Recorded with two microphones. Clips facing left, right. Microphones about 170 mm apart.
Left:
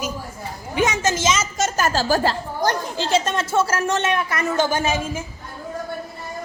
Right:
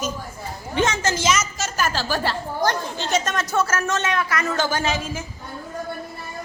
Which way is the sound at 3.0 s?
30° left (ahead or behind).